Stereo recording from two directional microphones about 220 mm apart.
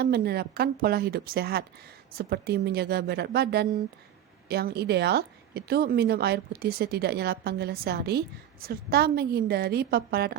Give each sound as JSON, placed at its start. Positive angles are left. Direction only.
{"t": 0.0, "sound": "speech", "side_deg": -45}